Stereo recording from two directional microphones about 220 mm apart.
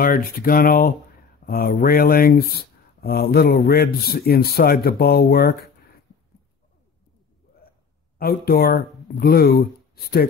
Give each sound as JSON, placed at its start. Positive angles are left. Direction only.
{"t": 0.0, "sound": "speech", "side_deg": 40}
{"t": 8.2, "sound": "speech", "side_deg": 45}